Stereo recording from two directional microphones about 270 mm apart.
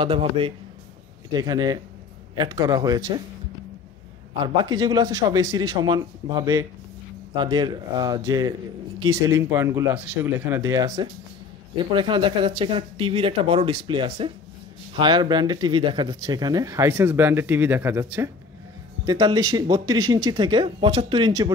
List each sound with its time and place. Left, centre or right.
0.0 s speech: centre
4.3 s speech: centre